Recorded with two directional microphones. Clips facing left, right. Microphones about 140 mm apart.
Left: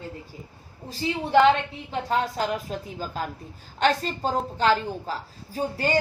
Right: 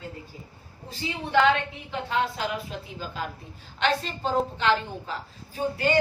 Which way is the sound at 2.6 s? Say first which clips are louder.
Left 4 dB; 40° left (ahead or behind).